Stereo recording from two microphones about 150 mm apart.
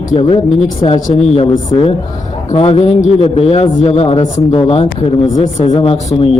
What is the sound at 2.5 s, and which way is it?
A man's voice, 40° left (ahead or behind).